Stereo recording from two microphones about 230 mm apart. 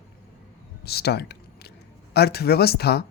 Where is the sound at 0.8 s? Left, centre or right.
Left.